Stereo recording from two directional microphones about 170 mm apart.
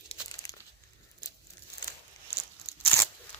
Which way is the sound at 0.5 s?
75° left (ahead or behind).